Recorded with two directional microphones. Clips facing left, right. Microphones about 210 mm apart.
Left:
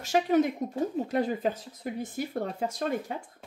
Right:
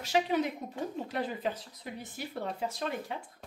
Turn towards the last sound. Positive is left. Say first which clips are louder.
# left 5 dB
turn(degrees=45)  # may be behind; listen again after turning